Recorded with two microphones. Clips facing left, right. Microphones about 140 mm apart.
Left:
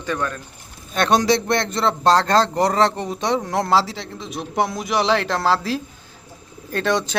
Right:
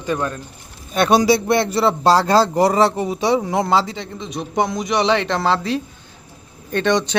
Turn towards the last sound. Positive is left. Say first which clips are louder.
# right 3 dB
turn(degrees=0)  # may be behind; listen again after turning